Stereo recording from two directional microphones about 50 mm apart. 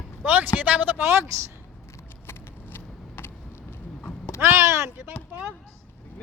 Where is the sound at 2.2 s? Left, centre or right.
Left.